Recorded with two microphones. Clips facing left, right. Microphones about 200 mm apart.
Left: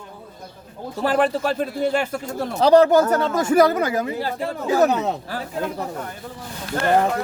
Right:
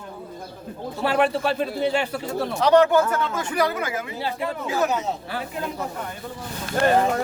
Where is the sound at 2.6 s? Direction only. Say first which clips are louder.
Left 3 dB; 35° left (ahead or behind).